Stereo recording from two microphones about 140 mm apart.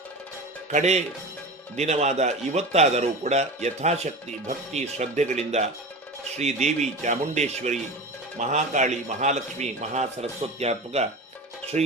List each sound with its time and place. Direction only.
0.7 s a man's voice: 55° right (ahead or behind)